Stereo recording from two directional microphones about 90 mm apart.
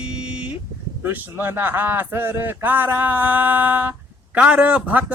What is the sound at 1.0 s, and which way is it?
A man's voice, 25° right (ahead or behind).